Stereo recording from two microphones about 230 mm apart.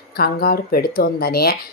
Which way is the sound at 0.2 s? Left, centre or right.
Left.